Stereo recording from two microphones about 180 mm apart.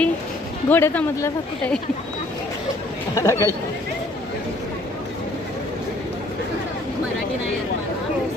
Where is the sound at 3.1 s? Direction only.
15° left (ahead or behind).